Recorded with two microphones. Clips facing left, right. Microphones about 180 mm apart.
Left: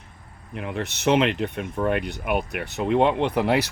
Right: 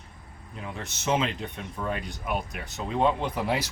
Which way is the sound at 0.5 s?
65° left (ahead or behind).